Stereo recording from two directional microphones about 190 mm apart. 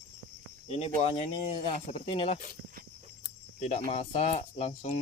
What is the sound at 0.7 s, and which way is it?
Speech, 35° left (ahead or behind).